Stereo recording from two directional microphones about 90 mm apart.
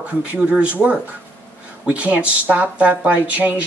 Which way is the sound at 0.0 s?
15° right (ahead or behind).